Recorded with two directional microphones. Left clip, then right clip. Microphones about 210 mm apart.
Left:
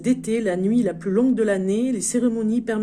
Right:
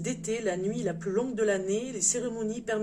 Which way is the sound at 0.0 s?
50° left (ahead or behind).